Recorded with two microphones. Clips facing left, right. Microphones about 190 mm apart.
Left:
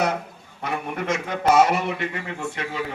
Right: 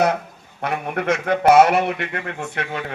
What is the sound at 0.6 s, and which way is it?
A man's voice, 65° right (ahead or behind).